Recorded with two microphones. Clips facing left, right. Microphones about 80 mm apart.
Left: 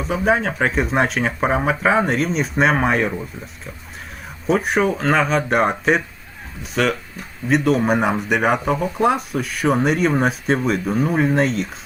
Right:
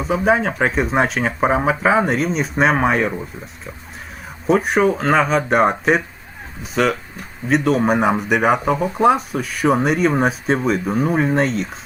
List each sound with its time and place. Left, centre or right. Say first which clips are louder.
0.0 s speech: right 2 dB; centre
4.4 s speech: right 2 dB; centre